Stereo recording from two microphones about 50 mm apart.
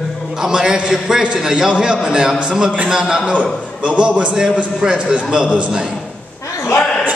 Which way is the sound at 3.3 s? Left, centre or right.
Right.